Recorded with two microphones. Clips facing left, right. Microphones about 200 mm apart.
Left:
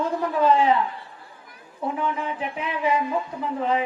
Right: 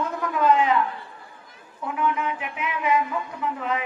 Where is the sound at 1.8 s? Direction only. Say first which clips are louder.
Right 1 dB; 30° left (ahead or behind).